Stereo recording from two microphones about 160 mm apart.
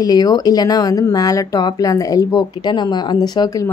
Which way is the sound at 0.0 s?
25° left (ahead or behind).